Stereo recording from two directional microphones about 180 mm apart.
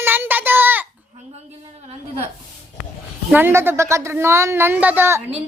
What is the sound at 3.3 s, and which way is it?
A woman's voice, 10° right (ahead or behind).